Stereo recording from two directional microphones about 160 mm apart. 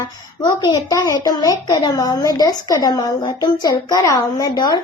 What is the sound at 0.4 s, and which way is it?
A woman's voice, 25° left (ahead or behind).